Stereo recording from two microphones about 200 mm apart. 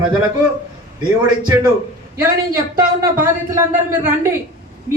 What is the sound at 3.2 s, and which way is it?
Speech, 15° right (ahead or behind).